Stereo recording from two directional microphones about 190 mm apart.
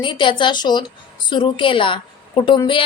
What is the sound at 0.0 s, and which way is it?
A woman's voice, 25° left (ahead or behind).